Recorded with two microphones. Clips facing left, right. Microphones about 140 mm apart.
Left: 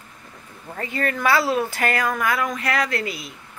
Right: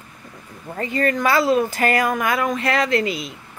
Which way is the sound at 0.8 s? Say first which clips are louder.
Right 5 dB; centre (ahead or behind).